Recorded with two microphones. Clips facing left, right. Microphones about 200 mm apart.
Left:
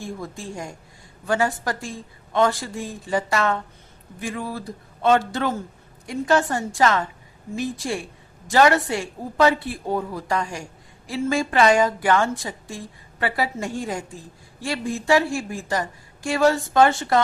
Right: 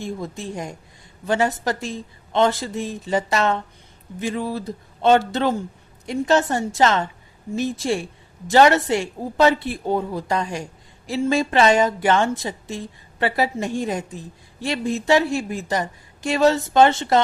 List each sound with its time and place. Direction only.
0.0 s a woman's voice: 20° right (ahead or behind)